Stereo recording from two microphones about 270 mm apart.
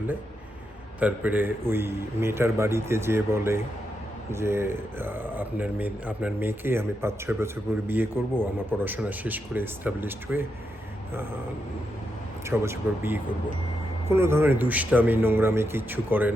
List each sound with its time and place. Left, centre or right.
0.9 s speech: centre
12.5 s speech: centre